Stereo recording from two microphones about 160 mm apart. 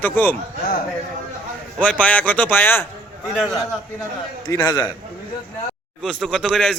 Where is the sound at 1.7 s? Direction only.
5° left (ahead or behind).